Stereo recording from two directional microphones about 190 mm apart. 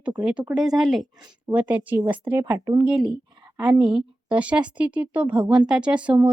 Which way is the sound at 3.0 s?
20° right (ahead or behind).